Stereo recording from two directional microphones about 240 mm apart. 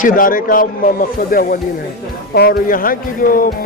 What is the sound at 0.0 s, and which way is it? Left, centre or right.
Speech, left.